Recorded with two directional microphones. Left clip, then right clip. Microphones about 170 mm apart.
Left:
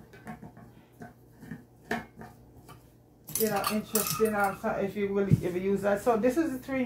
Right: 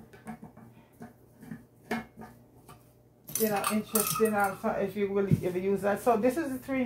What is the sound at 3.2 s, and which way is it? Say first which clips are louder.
Speech: even; 10° left (ahead or behind).